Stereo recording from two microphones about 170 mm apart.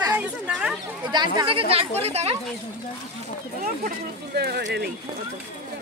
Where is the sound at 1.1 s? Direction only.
25° right (ahead or behind).